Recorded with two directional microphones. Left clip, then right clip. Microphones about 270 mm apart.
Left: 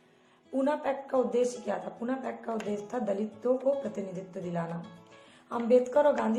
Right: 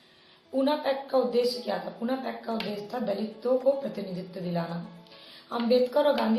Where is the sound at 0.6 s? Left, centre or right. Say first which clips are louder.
Right 3 dB; left.